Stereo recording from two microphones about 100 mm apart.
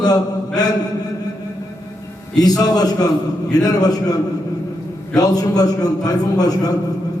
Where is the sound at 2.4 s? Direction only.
40° left (ahead or behind).